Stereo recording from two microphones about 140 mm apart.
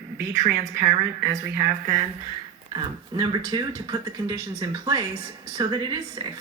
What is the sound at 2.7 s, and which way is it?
Speech, 30° right (ahead or behind).